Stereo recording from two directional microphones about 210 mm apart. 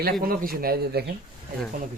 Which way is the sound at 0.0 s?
45° right (ahead or behind).